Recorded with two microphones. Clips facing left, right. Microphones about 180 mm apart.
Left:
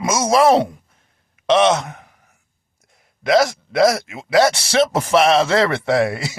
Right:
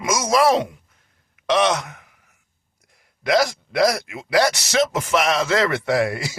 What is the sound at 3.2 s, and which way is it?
Speech, 25° left (ahead or behind).